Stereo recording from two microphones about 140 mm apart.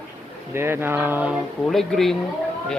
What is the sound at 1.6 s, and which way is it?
Speech, centre (ahead or behind).